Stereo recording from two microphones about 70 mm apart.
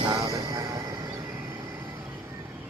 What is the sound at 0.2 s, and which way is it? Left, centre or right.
Vehicle, right.